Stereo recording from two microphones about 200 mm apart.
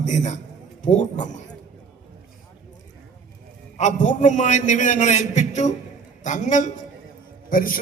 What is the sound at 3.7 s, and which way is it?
A man's voice, 35° left (ahead or behind).